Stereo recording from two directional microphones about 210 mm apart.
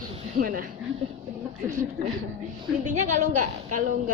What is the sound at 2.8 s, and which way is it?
A woman's voice, 35° right (ahead or behind).